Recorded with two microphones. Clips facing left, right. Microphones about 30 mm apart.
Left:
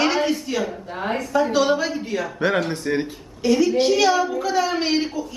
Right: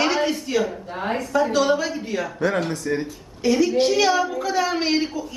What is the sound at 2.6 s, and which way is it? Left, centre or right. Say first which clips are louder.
Speech: left 1 dB; left.